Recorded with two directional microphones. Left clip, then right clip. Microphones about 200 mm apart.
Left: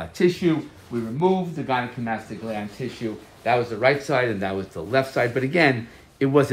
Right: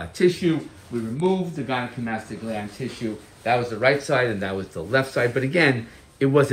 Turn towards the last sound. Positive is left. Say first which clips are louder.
# even
turn(degrees=50)  # may be behind; listen again after turning